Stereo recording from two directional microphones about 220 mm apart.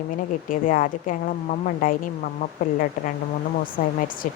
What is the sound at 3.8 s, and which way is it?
Speech, 35° left (ahead or behind).